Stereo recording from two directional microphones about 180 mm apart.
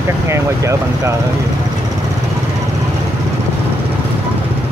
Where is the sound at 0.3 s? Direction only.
15° right (ahead or behind).